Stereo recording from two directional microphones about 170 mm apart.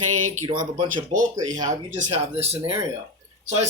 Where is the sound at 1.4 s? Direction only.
20° right (ahead or behind).